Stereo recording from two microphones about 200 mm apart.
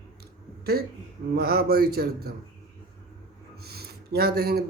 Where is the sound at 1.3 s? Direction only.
50° right (ahead or behind).